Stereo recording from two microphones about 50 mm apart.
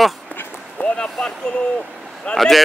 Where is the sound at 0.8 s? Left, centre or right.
Centre.